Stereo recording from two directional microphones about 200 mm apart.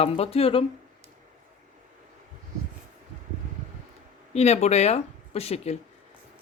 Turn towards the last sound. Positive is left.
turn(degrees=30)  # may be behind; listen again after turning